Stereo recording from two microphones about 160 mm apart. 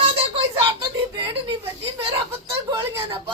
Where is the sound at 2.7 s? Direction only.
25° right (ahead or behind).